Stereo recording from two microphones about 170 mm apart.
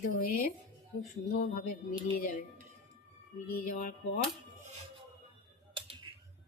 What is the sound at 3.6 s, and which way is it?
Music, 50° left (ahead or behind).